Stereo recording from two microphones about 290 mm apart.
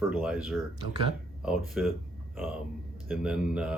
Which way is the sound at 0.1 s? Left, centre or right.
Centre.